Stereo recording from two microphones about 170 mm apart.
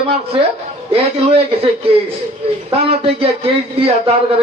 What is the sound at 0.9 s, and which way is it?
Speech, 35° right (ahead or behind).